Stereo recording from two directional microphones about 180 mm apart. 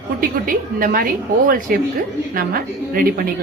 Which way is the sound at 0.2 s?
50° right (ahead or behind).